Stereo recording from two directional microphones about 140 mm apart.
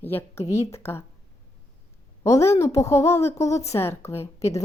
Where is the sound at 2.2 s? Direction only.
20° left (ahead or behind).